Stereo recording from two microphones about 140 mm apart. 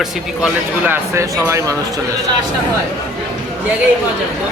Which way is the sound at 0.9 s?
20° right (ahead or behind).